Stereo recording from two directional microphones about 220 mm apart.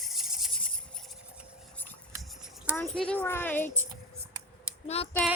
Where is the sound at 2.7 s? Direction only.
5° left (ahead or behind).